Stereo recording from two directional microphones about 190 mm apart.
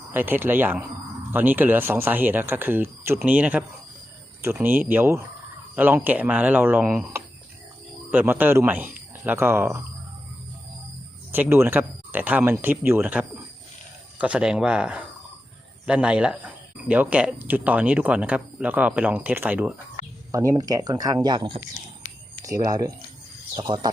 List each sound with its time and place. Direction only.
0.1 s speech: 10° right (ahead or behind)
11.3 s speech: 10° right (ahead or behind)